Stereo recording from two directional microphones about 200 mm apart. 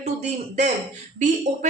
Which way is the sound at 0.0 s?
35° right (ahead or behind).